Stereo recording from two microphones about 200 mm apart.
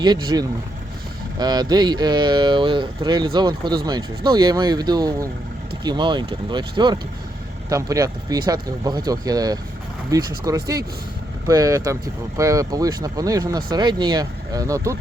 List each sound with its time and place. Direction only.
0.0 s speech: 20° right (ahead or behind)